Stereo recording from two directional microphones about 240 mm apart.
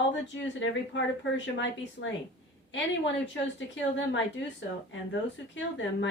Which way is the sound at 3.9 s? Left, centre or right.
Left.